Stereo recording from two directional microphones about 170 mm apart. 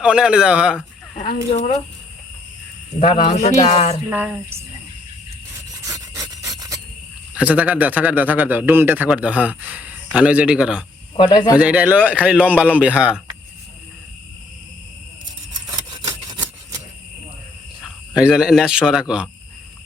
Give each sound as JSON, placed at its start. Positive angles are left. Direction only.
{"t": 0.0, "sound": "speech", "side_deg": -5}
{"t": 3.0, "sound": "speech", "side_deg": 35}
{"t": 4.1, "sound": "a man's voice", "side_deg": -10}
{"t": 5.8, "sound": "rub", "side_deg": -20}
{"t": 7.3, "sound": "a man's voice", "side_deg": -10}
{"t": 11.2, "sound": "speech", "side_deg": 25}
{"t": 11.5, "sound": "a man's voice", "side_deg": -10}
{"t": 15.7, "sound": "a sound", "side_deg": -25}
{"t": 17.8, "sound": "speech", "side_deg": -5}